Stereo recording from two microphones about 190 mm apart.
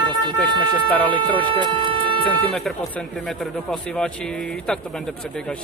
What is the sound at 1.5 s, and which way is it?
Speech, 25° right (ahead or behind).